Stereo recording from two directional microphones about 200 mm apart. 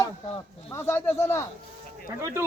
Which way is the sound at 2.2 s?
15° right (ahead or behind).